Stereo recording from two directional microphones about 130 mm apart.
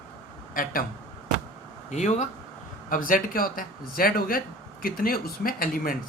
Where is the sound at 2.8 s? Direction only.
90° left.